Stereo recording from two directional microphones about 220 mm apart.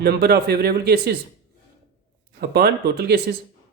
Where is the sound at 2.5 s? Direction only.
45° right (ahead or behind).